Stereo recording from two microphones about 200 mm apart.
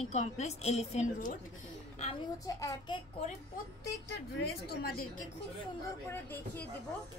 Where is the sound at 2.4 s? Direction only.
15° left (ahead or behind).